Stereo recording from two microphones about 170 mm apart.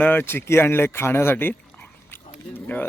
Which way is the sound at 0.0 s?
10° left (ahead or behind).